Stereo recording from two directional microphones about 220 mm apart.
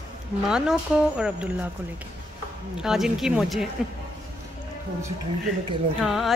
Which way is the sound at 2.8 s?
Centre (ahead or behind).